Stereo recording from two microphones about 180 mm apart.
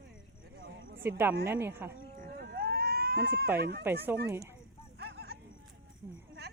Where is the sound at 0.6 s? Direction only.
90° right.